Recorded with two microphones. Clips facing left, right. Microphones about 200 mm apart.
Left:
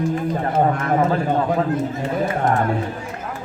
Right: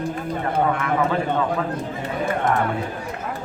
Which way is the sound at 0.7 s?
40° left (ahead or behind).